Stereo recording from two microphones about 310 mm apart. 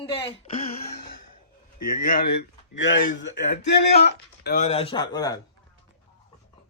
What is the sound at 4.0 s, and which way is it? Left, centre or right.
Speech, left.